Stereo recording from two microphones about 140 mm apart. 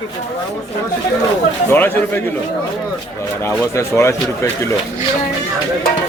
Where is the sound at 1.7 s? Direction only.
15° left (ahead or behind).